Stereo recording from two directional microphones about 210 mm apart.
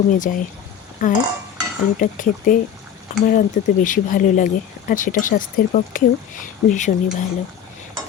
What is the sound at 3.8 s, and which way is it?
Speech, 40° left (ahead or behind).